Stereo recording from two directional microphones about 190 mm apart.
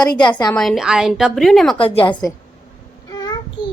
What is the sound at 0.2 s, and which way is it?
Speech, 25° left (ahead or behind).